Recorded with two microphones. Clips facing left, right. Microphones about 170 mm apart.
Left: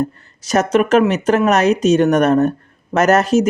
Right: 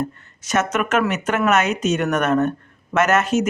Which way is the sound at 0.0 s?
35° left (ahead or behind).